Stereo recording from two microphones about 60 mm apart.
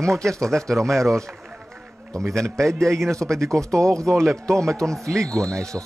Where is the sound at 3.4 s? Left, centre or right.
Right.